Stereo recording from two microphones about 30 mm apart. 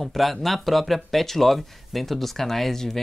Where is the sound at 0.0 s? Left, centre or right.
Centre.